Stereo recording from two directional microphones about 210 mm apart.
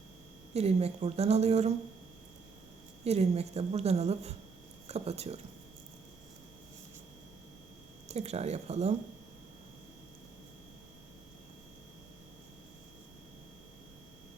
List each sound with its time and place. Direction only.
0.5 s a woman's voice: 30° right (ahead or behind)
3.0 s a woman's voice: 30° right (ahead or behind)
8.0 s a woman's voice: 30° right (ahead or behind)